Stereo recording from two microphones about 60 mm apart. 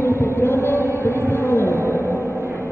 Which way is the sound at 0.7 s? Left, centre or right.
Right.